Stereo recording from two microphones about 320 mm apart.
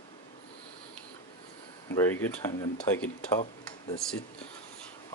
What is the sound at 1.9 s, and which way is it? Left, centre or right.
Speech, centre.